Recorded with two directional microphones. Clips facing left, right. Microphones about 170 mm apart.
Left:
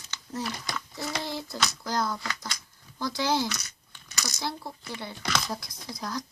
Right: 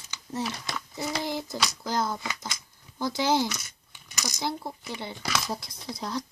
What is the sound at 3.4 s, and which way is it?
Coin, 15° right (ahead or behind).